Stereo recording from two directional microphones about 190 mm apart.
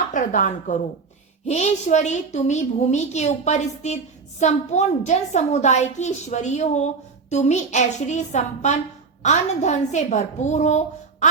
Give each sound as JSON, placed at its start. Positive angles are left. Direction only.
{"t": 0.1, "sound": "a child's voice", "side_deg": 40}